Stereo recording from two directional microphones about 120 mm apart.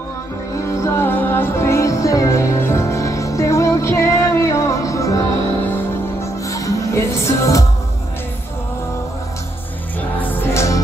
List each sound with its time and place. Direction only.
0.7 s music: 25° left (ahead or behind)
6.2 s music: 25° left (ahead or behind)
10.2 s music: 20° left (ahead or behind)